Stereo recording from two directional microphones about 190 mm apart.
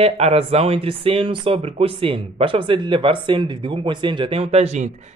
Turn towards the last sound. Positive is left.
turn(degrees=-35)  # may be behind; listen again after turning